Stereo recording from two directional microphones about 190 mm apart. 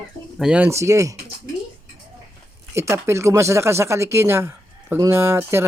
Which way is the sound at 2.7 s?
15° right (ahead or behind).